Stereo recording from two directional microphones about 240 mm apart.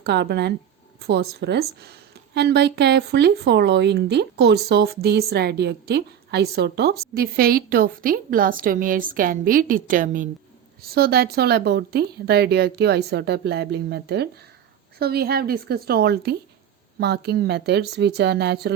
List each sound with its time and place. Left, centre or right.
0.0 s a woman's voice: right